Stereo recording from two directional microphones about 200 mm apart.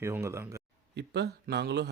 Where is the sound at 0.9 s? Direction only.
55° right (ahead or behind).